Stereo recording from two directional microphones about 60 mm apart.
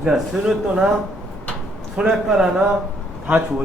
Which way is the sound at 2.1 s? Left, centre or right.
Centre.